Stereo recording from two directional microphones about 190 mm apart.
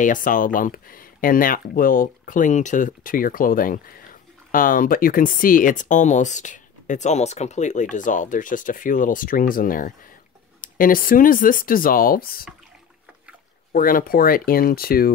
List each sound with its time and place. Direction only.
0.0 s speech: 45° left (ahead or behind)
13.7 s speech: 50° left (ahead or behind)